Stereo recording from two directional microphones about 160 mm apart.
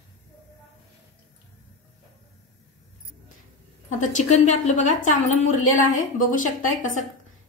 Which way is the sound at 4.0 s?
50° left (ahead or behind).